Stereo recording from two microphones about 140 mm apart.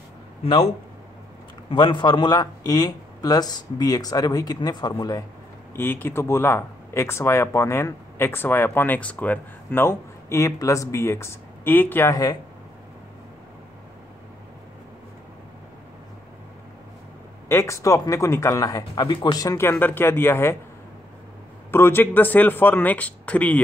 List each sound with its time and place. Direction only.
0.4 s speech: 45° left (ahead or behind)
1.7 s speech: 35° left (ahead or behind)
5.8 s speech: 15° left (ahead or behind)
17.5 s speech: 20° left (ahead or behind)
21.6 s speech: 15° left (ahead or behind)